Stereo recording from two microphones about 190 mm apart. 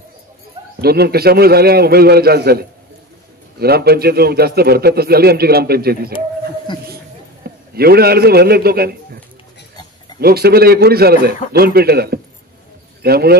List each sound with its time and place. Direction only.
0.7 s a man's voice: 55° right (ahead or behind)
7.7 s a man's voice: 55° right (ahead or behind)
10.2 s a man's voice: 55° right (ahead or behind)